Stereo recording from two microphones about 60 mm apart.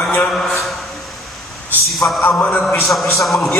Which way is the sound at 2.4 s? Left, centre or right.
Left.